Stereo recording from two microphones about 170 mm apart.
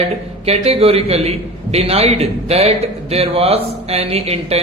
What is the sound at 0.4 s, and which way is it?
Speech, 35° right (ahead or behind).